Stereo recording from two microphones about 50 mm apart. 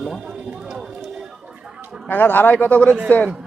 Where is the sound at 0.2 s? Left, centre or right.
Centre.